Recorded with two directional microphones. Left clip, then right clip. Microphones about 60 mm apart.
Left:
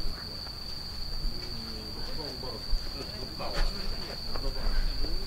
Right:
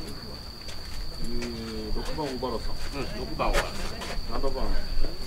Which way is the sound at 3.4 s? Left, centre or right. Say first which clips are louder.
Right 10 dB; right.